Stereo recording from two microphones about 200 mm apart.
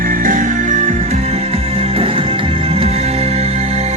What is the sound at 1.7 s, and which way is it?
Music, 30° right (ahead or behind).